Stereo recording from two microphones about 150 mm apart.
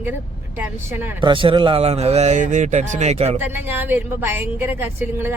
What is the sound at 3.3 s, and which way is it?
A woman's voice, 15° right (ahead or behind).